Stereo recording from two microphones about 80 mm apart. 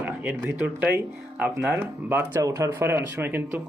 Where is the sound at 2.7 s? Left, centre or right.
Right.